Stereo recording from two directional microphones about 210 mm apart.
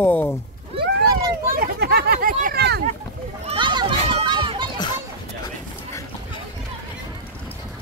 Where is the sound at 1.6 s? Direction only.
50° right (ahead or behind).